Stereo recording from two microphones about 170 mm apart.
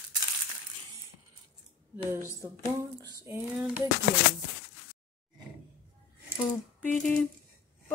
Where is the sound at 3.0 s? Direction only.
20° right (ahead or behind).